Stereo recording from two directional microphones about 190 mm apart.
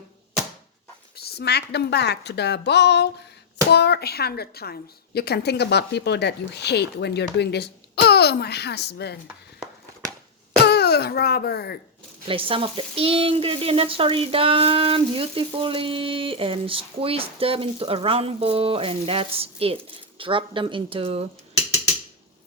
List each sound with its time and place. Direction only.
1.1 s speech: 55° left (ahead or behind)
10.6 s speech: 60° left (ahead or behind)
12.2 s speech: 30° right (ahead or behind)